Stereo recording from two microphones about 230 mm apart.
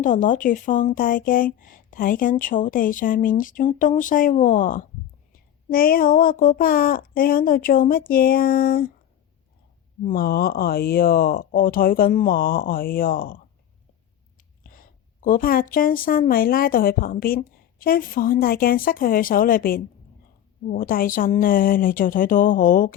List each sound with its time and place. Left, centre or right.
0.0 s speech: left
10.0 s a woman's voice: left